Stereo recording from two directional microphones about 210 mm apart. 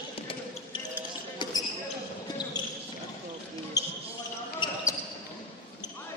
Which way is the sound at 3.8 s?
15° left (ahead or behind).